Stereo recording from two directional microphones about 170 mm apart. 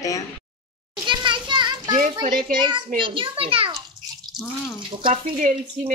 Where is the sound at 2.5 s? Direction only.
30° right (ahead or behind).